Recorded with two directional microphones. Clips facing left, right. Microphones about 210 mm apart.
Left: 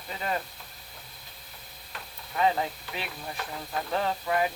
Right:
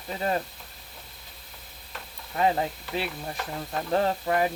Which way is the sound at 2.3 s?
35° right (ahead or behind).